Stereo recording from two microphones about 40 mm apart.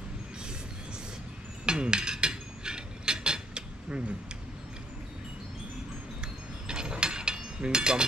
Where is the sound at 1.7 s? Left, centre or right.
Right.